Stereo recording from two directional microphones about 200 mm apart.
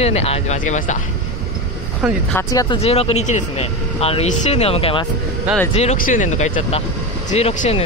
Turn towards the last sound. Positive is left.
turn(degrees=30)  # may be behind; listen again after turning